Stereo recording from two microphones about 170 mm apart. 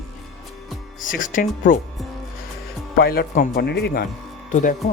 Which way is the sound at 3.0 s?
65° left (ahead or behind).